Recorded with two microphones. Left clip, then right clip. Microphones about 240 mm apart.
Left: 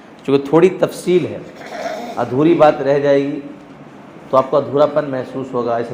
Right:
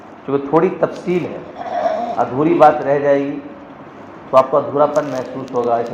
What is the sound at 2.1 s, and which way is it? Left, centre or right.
A man's voice, left.